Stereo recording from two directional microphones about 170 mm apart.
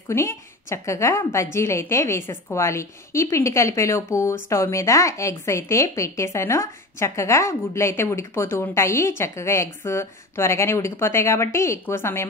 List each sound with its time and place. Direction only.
0.1 s a woman's voice: 15° left (ahead or behind)